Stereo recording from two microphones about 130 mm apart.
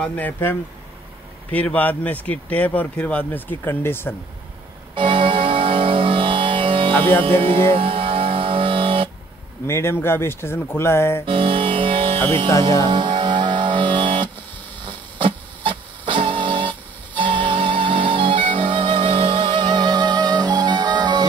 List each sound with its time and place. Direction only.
0.0 s speech: 15° left (ahead or behind)
4.9 s music: 40° right (ahead or behind)
9.7 s speech: 20° left (ahead or behind)
11.2 s music: 40° right (ahead or behind)